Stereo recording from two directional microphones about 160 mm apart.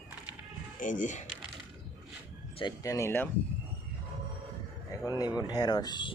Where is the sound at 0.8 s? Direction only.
55° left (ahead or behind).